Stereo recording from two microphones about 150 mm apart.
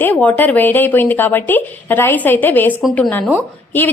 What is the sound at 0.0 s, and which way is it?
Speech, 10° left (ahead or behind).